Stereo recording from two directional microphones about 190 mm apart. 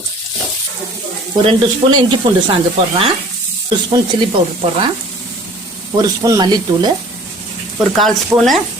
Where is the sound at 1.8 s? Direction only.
30° right (ahead or behind).